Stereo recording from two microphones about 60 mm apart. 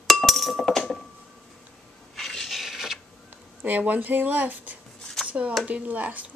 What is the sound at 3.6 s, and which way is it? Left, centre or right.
Speech, right.